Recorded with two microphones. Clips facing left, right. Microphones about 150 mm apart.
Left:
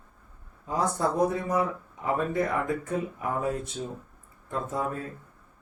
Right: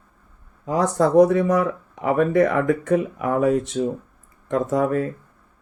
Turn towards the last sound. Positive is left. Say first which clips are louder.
# right 11 dB
turn(degrees=-80)